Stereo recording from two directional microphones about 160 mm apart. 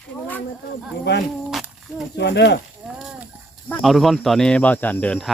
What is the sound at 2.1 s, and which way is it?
Speech, 90° left.